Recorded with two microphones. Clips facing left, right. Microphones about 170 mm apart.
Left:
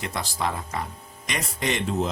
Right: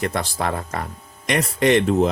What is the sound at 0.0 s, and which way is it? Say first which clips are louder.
Speech: right 5 dB; 60° right (ahead or behind).